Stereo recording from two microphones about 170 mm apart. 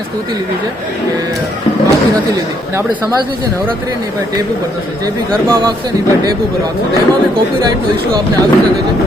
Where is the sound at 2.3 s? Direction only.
15° right (ahead or behind).